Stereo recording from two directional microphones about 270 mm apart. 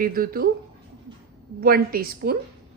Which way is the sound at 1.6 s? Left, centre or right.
Right.